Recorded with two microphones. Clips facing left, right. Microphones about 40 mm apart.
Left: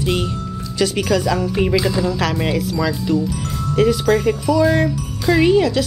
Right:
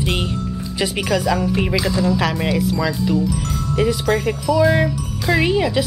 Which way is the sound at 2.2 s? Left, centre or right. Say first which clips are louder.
Even; centre.